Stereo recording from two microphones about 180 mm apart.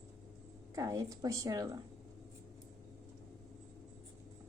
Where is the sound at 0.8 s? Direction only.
20° right (ahead or behind).